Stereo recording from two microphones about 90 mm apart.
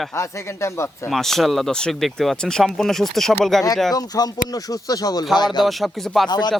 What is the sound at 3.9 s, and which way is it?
Speech, 45° left (ahead or behind).